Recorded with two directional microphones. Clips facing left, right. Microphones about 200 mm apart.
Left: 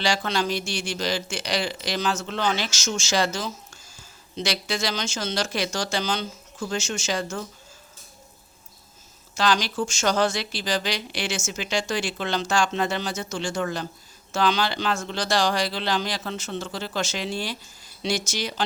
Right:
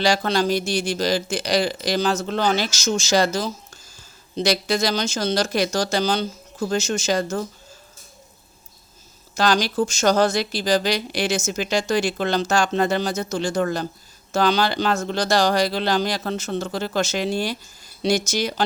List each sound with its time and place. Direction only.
0.0 s speech: 40° right (ahead or behind)
9.3 s speech: 40° right (ahead or behind)